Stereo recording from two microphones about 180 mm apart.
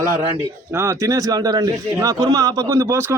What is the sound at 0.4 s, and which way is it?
A man's voice, 15° right (ahead or behind).